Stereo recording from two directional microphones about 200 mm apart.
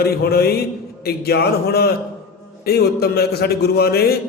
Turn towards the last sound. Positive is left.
turn(degrees=50)  # may be behind; listen again after turning